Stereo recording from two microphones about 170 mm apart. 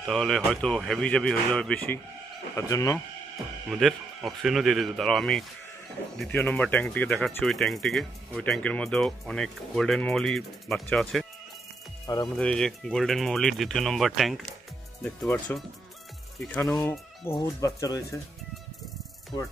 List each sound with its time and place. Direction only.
0.0 s speech: centre (ahead or behind)
2.5 s speech: 20° left (ahead or behind)
3.6 s speech: centre (ahead or behind)
12.4 s speech: 5° left (ahead or behind)
17.3 s speech: 20° left (ahead or behind)